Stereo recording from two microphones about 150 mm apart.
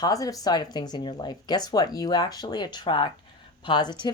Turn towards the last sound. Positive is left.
turn(degrees=30)  # may be behind; listen again after turning